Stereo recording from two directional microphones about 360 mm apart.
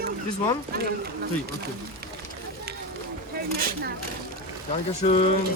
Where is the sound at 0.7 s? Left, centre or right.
Right.